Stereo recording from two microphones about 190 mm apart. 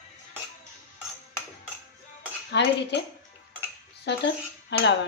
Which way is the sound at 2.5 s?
65° left (ahead or behind).